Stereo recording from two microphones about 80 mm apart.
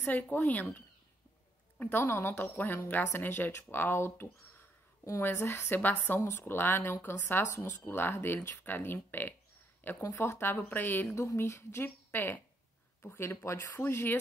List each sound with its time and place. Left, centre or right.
0.0 s speech: left
5.3 s speech: left
10.0 s speech: left
11.1 s a woman's voice: left